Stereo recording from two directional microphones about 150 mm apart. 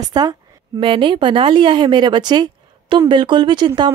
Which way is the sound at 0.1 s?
25° right (ahead or behind).